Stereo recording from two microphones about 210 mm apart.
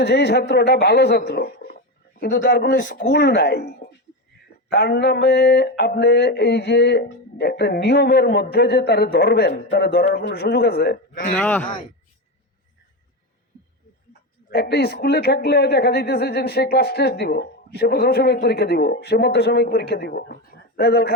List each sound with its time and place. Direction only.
0.0 s speech: 50° left (ahead or behind)
11.3 s speech: 5° left (ahead or behind)
14.5 s speech: 45° left (ahead or behind)